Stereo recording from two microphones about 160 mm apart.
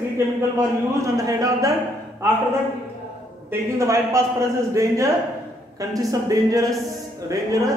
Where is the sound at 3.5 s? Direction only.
20° right (ahead or behind).